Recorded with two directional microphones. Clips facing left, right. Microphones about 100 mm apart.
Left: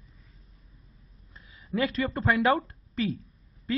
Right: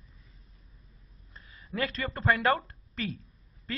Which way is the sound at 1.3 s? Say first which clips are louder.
Left 6 dB; 5° left (ahead or behind).